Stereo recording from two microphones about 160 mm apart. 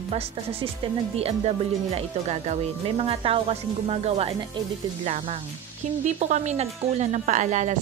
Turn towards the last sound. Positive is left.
turn(degrees=-50)  # may be behind; listen again after turning